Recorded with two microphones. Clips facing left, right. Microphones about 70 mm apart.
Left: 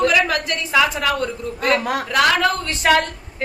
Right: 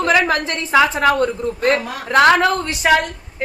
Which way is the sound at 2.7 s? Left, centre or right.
Centre.